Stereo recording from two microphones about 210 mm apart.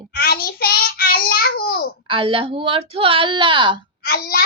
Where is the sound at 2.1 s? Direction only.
25° right (ahead or behind).